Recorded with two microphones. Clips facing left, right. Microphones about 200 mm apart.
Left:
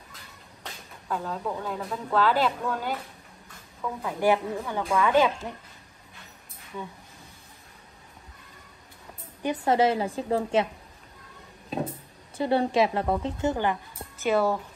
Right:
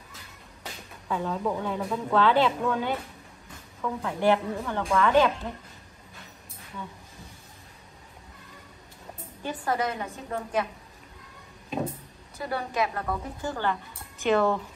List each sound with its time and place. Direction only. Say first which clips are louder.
1.0 s a woman's voice: right 2 dB; centre (ahead or behind)
9.4 s a woman's voice: left 6 dB; 25° left (ahead or behind)
12.4 s a woman's voice: left 6 dB; 30° left (ahead or behind)
14.2 s a woman's voice: right 1 dB; 5° left (ahead or behind)